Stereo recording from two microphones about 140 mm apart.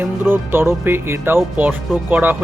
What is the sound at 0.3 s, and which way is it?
Music, 15° right (ahead or behind).